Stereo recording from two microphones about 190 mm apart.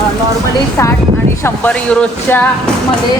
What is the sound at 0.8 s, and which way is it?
Speech, 15° left (ahead or behind).